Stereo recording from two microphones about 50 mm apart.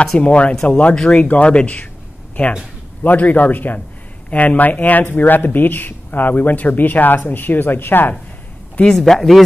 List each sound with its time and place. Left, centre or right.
0.2 s speech: left
0.9 s speech: centre
1.2 s speech: left
3.0 s speech: left
8.9 s speech: centre